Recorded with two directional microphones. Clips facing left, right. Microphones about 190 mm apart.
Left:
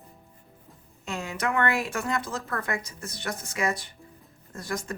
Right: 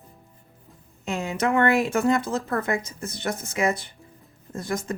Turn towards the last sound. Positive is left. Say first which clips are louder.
# right 4 dB
turn(degrees=-25)  # may be behind; listen again after turning